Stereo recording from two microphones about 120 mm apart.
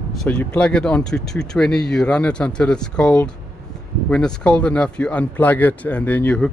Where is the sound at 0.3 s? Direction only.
15° left (ahead or behind).